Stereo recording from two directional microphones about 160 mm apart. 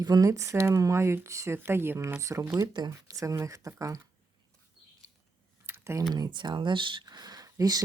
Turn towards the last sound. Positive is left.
turn(degrees=-25)  # may be behind; listen again after turning